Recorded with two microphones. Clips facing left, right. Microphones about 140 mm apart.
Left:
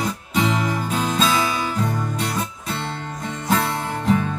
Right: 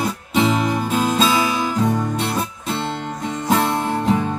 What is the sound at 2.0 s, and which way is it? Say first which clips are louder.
Music: right 3 dB; 25° right (ahead or behind).